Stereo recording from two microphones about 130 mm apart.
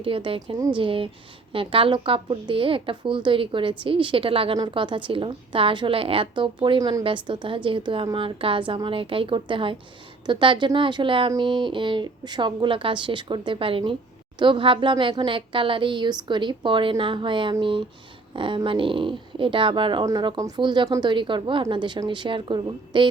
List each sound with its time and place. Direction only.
0.0 s a woman's voice: 45° right (ahead or behind)
20.1 s speech: 30° right (ahead or behind)